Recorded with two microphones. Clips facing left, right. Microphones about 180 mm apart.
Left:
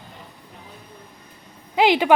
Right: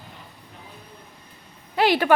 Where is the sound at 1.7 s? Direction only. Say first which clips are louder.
Left 2 dB; 15° left (ahead or behind).